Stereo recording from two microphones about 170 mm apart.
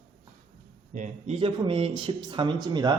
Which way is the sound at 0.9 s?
40° right (ahead or behind).